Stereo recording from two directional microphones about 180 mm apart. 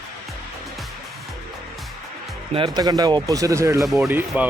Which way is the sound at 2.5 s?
25° right (ahead or behind).